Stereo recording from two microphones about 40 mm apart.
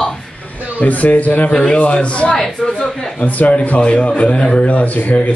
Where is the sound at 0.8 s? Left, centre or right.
Left.